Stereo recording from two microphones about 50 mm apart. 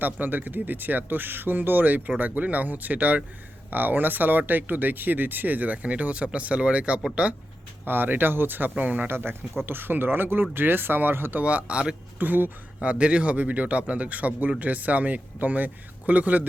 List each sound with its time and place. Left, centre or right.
0.0 s a man's voice: right
7.9 s speech: right
9.0 s speech: right
11.3 s a man's voice: right
12.2 s speech: right
12.9 s a man's voice: right